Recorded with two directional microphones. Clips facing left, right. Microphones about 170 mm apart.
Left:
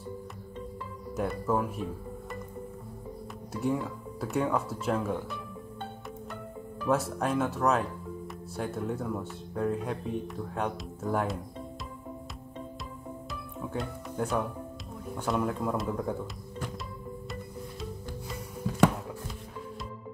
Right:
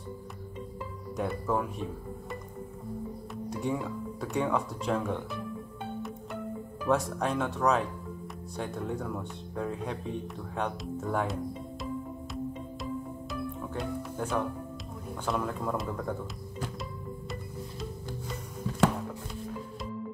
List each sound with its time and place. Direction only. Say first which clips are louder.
1.1 s speech: left 1 dB; centre (ahead or behind)
3.4 s speech: left 2 dB; 5° left (ahead or behind)
6.9 s speech: even; 5° left (ahead or behind)
12.8 s music: right 5 dB; centre (ahead or behind)
15.2 s speech: left 2 dB; 5° left (ahead or behind)